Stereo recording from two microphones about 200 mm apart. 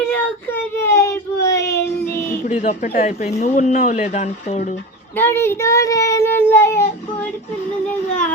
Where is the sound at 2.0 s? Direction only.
40° left (ahead or behind).